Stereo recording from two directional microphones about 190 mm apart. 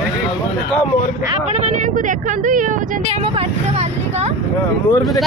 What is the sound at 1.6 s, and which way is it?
Speech, 40° right (ahead or behind).